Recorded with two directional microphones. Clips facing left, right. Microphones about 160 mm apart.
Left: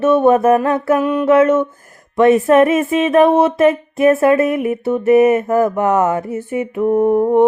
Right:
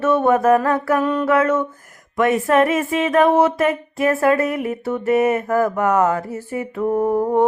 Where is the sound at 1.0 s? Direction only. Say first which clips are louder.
Left 3 dB; 10° left (ahead or behind).